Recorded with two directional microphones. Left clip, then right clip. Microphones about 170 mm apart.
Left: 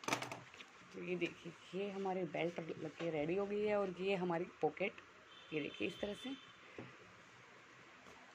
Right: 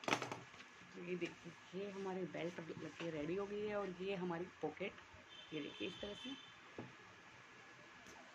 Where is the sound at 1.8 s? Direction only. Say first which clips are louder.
Left 5 dB; 40° left (ahead or behind).